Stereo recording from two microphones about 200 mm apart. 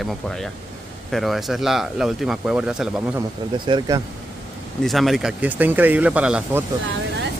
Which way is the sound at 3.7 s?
20° right (ahead or behind).